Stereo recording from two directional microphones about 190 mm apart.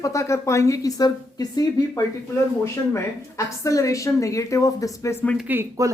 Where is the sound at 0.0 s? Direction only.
15° left (ahead or behind).